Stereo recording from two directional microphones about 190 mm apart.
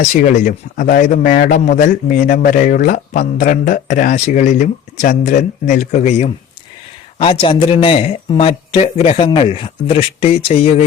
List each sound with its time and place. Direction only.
0.0 s a man's voice: 45° left (ahead or behind)